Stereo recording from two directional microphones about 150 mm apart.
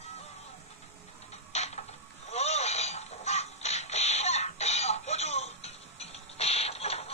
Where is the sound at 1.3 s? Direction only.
45° left (ahead or behind).